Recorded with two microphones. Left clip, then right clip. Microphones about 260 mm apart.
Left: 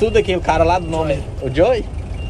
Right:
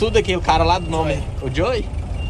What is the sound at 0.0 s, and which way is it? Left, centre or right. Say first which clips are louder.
Speech: left 2 dB; centre.